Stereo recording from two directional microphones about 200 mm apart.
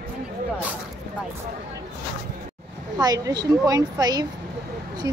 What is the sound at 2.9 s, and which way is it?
A woman's voice, 20° right (ahead or behind).